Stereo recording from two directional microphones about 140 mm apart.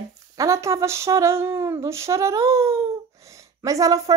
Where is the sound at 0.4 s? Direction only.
20° right (ahead or behind).